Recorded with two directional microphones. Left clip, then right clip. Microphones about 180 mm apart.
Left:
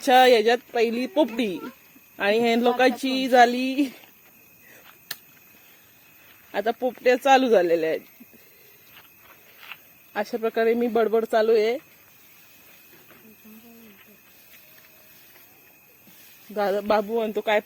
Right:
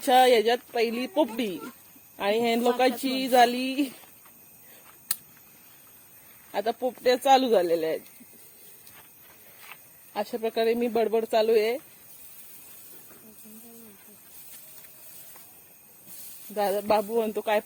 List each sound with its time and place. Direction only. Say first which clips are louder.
0.0 s speech: left 3 dB; 40° left (ahead or behind)
6.5 s speech: left 3 dB; 35° left (ahead or behind)
10.2 s speech: left 3 dB; 30° left (ahead or behind)
16.6 s speech: left 2 dB; 45° left (ahead or behind)
17.1 s speech: left 2 dB; 30° left (ahead or behind)